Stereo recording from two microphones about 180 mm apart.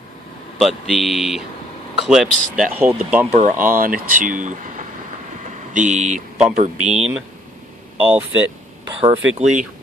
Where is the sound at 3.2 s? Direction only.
40° right (ahead or behind).